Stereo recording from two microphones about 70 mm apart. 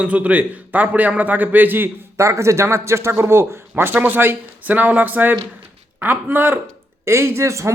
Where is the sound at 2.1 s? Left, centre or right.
Right.